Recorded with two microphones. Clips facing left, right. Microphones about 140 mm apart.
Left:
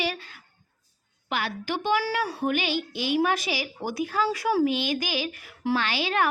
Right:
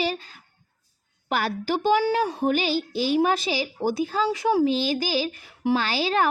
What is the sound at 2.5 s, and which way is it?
A woman's voice, 35° right (ahead or behind).